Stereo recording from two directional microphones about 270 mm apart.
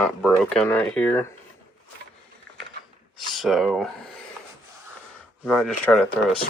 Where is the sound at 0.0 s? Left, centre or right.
Centre.